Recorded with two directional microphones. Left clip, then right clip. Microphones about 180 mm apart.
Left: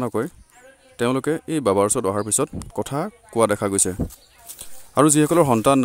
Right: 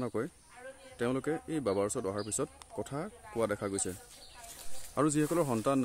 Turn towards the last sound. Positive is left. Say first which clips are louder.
# left 14 dB
turn(degrees=55)  # may be behind; listen again after turning